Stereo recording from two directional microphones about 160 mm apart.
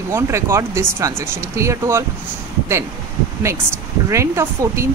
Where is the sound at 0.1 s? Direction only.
15° right (ahead or behind).